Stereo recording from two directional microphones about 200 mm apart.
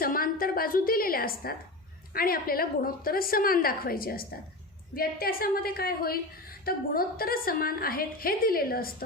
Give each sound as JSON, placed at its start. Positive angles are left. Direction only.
{"t": 0.0, "sound": "a woman's voice", "side_deg": 45}